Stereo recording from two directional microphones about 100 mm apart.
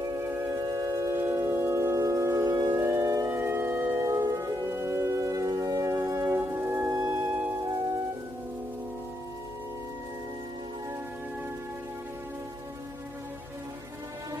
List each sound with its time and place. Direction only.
0.0 s singing bowl: 35° right (ahead or behind)
4.0 s music: 35° right (ahead or behind)
6.9 s music: 35° right (ahead or behind)